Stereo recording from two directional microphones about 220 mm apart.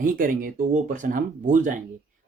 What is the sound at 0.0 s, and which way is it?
Speech, 40° right (ahead or behind).